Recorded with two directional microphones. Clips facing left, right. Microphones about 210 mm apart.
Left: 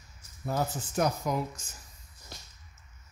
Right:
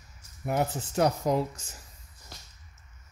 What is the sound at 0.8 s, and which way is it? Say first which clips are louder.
Speech: right 3 dB; 30° right (ahead or behind).